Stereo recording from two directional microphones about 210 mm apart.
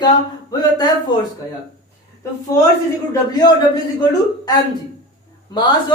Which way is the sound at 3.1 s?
20° left (ahead or behind).